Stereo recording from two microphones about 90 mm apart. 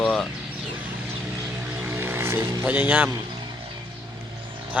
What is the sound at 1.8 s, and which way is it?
Vehicle, 25° right (ahead or behind).